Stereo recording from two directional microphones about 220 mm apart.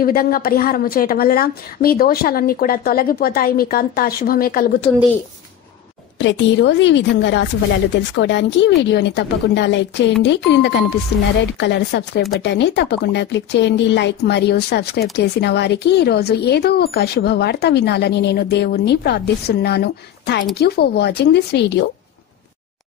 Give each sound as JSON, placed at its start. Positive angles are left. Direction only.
{"t": 0.0, "sound": "a woman's voice", "side_deg": 40}
{"t": 6.1, "sound": "speech", "side_deg": 55}